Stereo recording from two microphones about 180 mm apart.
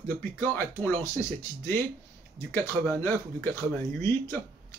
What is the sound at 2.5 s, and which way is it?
Speech, 10° left (ahead or behind).